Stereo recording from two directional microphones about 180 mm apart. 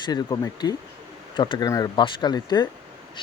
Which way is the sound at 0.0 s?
25° left (ahead or behind).